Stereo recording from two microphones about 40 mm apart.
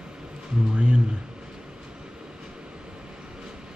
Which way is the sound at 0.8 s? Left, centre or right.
Right.